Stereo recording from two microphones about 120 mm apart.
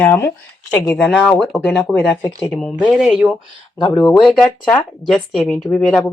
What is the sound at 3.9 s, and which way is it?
Speech, 25° left (ahead or behind).